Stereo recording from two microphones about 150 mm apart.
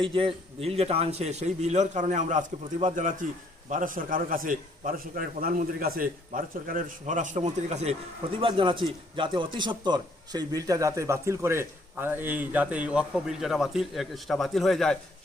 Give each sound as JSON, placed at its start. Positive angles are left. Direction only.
{"t": 0.0, "sound": "a man's voice", "side_deg": -35}
{"t": 8.4, "sound": "speech", "side_deg": -35}